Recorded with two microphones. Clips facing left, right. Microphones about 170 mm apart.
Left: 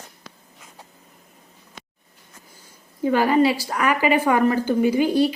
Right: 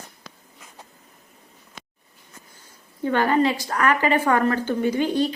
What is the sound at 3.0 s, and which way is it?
A woman's voice, 10° left (ahead or behind).